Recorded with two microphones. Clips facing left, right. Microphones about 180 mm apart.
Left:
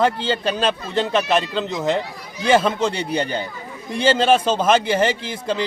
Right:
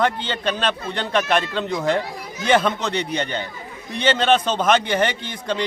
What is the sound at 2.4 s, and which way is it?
Speech, 30° left (ahead or behind).